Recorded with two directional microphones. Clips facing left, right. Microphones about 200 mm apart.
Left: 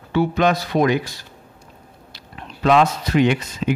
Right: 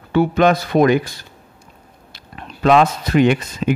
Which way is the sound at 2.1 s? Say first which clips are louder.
Right 2 dB; 55° right (ahead or behind).